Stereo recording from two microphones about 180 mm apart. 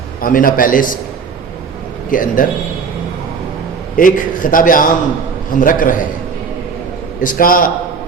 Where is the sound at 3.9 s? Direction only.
50° left (ahead or behind).